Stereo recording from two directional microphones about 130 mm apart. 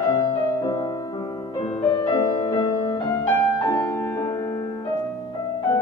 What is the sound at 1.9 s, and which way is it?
Music, 35° left (ahead or behind).